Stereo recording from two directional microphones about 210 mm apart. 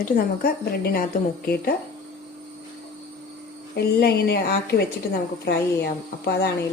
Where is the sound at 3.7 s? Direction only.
50° left (ahead or behind).